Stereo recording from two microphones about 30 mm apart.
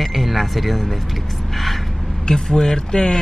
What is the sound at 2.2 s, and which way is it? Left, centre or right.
Speech, left.